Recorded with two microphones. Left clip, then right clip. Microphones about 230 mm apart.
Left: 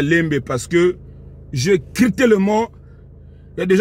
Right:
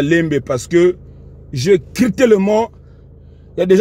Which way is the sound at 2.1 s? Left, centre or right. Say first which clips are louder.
Right 4 dB; right.